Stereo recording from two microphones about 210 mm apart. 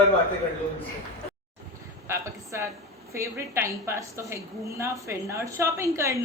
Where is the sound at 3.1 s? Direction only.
15° right (ahead or behind).